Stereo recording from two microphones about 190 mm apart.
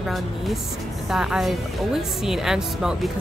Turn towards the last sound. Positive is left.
turn(degrees=-5)  # may be behind; listen again after turning